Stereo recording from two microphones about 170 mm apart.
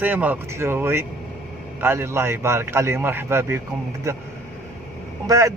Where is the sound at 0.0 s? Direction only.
10° right (ahead or behind).